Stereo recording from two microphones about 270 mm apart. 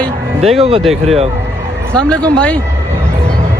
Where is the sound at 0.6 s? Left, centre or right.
Right.